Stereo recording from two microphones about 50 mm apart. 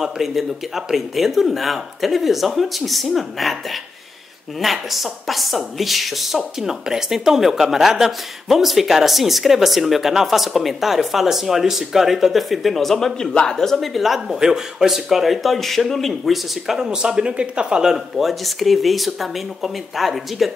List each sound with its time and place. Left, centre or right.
0.0 s a woman's voice: centre
4.6 s a woman's voice: centre
13.9 s a woman's voice: centre
16.7 s speech: centre
17.9 s a woman's voice: centre